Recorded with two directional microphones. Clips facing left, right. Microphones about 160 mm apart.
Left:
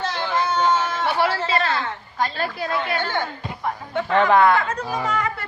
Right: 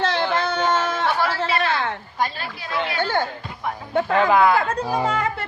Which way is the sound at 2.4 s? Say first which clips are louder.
Left 3 dB; 50° left (ahead or behind).